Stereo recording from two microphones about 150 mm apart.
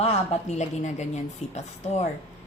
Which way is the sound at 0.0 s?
45° left (ahead or behind).